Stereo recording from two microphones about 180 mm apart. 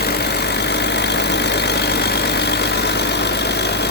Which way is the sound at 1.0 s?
70° left (ahead or behind).